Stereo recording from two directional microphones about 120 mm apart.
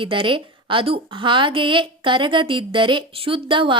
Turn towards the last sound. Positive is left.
turn(degrees=-45)  # may be behind; listen again after turning